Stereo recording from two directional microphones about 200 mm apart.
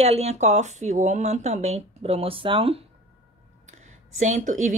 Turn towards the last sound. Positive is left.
turn(degrees=-40)  # may be behind; listen again after turning